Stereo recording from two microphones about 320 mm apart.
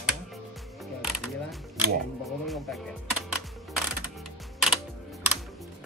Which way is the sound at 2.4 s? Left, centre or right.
Centre.